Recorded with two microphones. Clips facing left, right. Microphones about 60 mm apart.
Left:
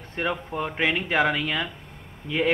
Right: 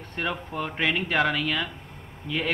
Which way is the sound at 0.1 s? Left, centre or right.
Centre.